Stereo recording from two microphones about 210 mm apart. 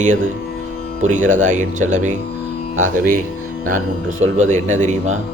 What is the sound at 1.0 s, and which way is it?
Speech, 35° right (ahead or behind).